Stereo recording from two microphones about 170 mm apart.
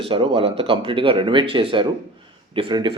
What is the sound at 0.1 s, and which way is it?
Speech, 30° right (ahead or behind).